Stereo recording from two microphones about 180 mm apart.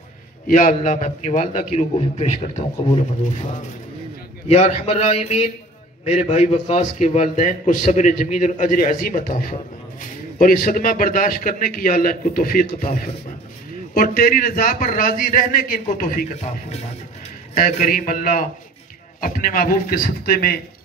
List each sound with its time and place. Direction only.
0.5 s a man's voice: 45° left (ahead or behind); by 3.4 s 30° left (ahead or behind)
4.5 s a man's voice: 40° left (ahead or behind)
17.6 s a man's voice: 50° left (ahead or behind)